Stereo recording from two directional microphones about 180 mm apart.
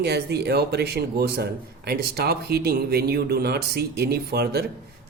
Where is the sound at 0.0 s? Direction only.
65° right (ahead or behind).